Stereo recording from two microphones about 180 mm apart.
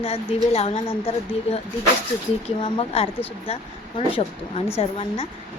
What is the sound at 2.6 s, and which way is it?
A woman's voice, 30° left (ahead or behind).